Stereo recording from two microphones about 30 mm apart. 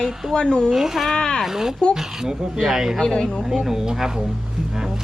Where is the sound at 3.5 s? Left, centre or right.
Centre.